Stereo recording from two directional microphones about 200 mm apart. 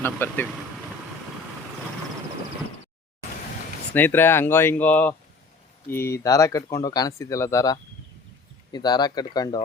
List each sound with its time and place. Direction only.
0.0 s speech: 10° left (ahead or behind)
3.9 s speech: 10° left (ahead or behind)